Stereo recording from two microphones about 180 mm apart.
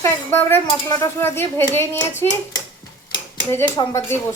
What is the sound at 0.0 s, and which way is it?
Speech, 10° left (ahead or behind).